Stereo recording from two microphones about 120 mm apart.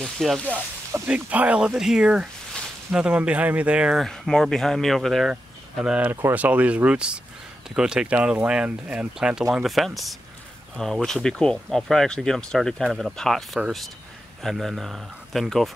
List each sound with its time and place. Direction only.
0.0 s speech: centre (ahead or behind)
0.5 s speech: 15° right (ahead or behind)